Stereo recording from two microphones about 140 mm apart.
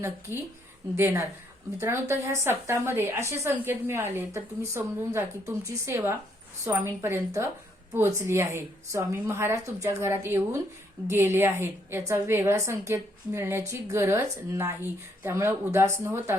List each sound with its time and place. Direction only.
0.9 s a woman's voice: 15° right (ahead or behind)